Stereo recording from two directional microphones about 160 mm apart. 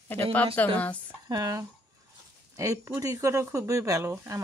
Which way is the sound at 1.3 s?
20° right (ahead or behind).